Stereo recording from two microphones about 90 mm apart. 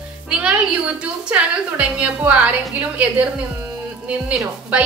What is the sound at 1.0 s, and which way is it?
A woman's voice, 15° right (ahead or behind).